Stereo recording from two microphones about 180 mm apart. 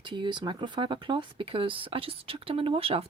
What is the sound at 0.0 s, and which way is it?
Speech, 25° right (ahead or behind).